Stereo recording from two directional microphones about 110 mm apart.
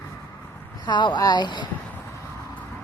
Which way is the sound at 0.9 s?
40° left (ahead or behind).